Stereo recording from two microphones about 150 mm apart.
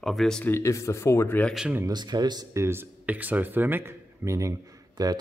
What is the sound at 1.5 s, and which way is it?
Speech, 5° right (ahead or behind).